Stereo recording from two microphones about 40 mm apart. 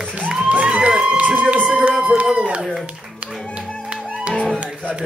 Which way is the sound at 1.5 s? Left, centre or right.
Right.